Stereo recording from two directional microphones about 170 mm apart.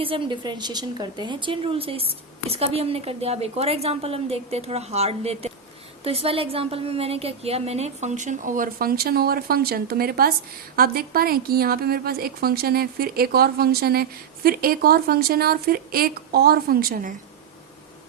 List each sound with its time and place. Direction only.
0.0 s a woman's voice: 30° right (ahead or behind); by 17.2 s 55° right (ahead or behind)